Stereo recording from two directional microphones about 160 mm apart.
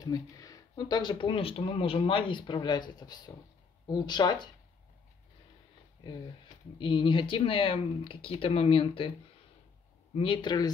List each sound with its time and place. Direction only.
0.0 s speech: 25° left (ahead or behind)
6.8 s speech: 30° left (ahead or behind)
10.1 s speech: 35° left (ahead or behind)